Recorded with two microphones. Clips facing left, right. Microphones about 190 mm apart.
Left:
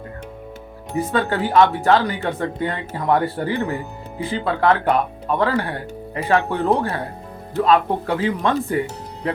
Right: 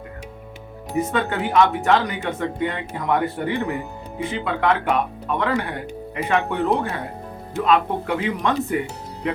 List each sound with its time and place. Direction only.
0.9 s speech: 35° left (ahead or behind)